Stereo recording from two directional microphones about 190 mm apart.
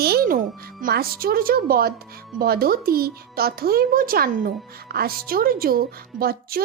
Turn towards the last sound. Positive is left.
turn(degrees=-50)  # may be behind; listen again after turning